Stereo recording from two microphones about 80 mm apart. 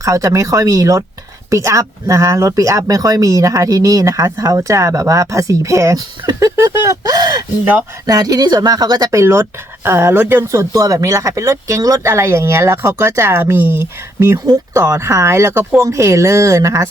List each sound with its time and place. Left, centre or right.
0.0 s speech: right
6.7 s a sound: right
8.0 s speech: right
9.1 s speech: right
10.7 s speech: right
14.7 s speech: right